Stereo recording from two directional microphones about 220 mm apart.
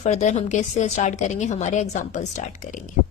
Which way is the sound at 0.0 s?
30° left (ahead or behind).